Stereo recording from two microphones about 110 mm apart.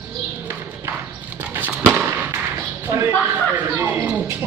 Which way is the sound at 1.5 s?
15° right (ahead or behind).